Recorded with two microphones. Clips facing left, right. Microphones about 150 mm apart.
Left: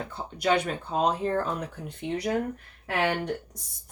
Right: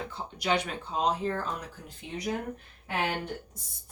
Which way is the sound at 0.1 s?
55° left (ahead or behind).